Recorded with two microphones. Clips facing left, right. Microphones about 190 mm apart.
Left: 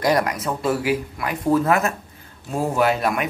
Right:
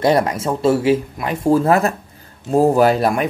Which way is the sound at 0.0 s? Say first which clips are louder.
Right 4 dB; 25° right (ahead or behind).